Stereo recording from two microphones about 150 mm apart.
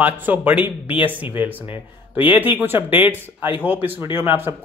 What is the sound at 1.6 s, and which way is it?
Speech, 35° left (ahead or behind).